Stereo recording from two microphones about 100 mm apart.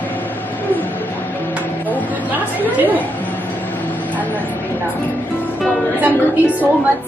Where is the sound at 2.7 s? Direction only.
15° right (ahead or behind).